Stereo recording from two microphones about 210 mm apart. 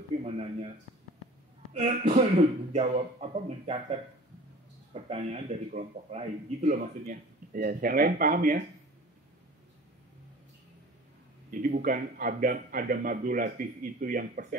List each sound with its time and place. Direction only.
0.2 s a man's voice: 30° right (ahead or behind)
11.5 s a man's voice: 40° right (ahead or behind)